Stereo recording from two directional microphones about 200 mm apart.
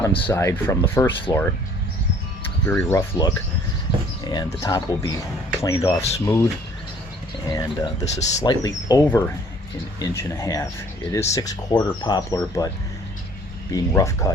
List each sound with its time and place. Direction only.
0.3 s speech: 10° left (ahead or behind)
2.4 s cricket: 10° left (ahead or behind)
4.2 s a sound: 20° left (ahead or behind)
4.6 s speech: 20° left (ahead or behind)
8.0 s speech: 35° left (ahead or behind)
8.4 s speech: 20° left (ahead or behind)
13.7 s speech: 15° left (ahead or behind)